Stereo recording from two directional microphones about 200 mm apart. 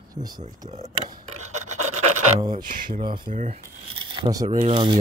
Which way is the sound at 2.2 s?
35° right (ahead or behind).